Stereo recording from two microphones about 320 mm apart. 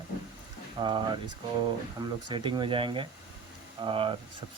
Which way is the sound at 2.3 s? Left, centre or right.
Centre.